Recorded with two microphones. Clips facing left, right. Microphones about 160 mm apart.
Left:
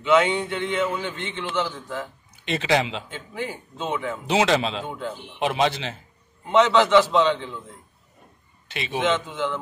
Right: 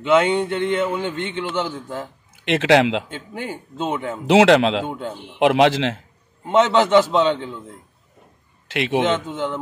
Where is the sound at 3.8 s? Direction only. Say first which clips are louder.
Right 3 dB; 30° right (ahead or behind).